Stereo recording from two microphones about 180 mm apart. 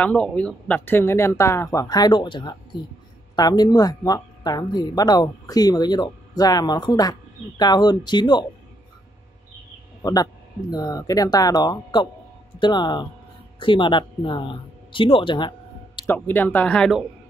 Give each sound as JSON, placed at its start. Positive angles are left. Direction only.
{"t": 0.0, "sound": "speech", "side_deg": 5}
{"t": 10.0, "sound": "speech", "side_deg": 20}
{"t": 16.1, "sound": "speech", "side_deg": 10}